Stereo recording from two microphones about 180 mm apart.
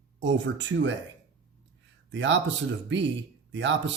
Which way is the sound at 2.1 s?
85° right.